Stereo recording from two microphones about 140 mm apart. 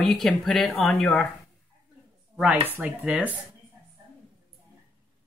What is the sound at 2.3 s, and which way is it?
Speech, 10° right (ahead or behind).